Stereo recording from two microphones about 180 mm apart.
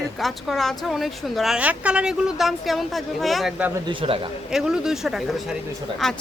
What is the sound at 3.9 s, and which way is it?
Speech, 30° right (ahead or behind).